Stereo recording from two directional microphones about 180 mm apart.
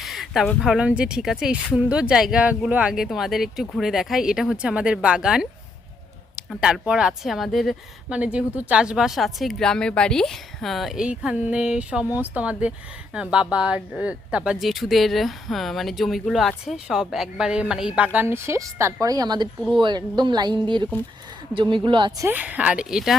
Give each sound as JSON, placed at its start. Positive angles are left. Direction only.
{"t": 0.0, "sound": "a woman's voice", "side_deg": 0}
{"t": 22.2, "sound": "speech", "side_deg": -10}